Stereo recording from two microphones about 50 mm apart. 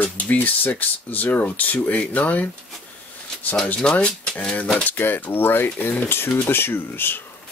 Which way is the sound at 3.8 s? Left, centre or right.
Centre.